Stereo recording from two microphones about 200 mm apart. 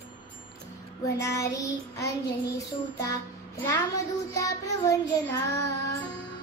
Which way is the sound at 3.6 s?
15° left (ahead or behind).